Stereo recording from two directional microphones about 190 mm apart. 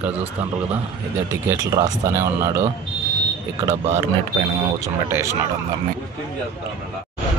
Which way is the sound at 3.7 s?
35° right (ahead or behind).